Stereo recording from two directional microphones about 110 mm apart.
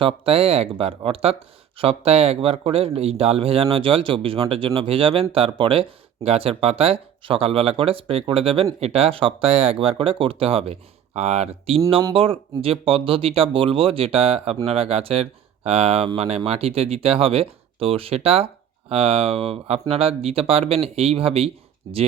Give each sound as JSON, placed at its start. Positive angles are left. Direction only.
{"t": 0.0, "sound": "speech", "side_deg": -60}
{"t": 12.1, "sound": "speech", "side_deg": -55}